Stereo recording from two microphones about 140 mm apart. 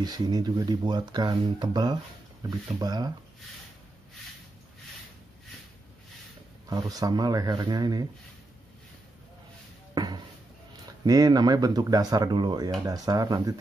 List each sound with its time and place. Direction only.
0.0 s speech: 30° right (ahead or behind)
6.7 s speech: 25° right (ahead or behind)
9.9 s a sound: 30° right (ahead or behind)
11.1 s speech: 25° right (ahead or behind)